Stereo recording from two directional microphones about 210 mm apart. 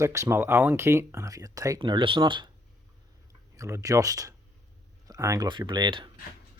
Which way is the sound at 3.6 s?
15° right (ahead or behind).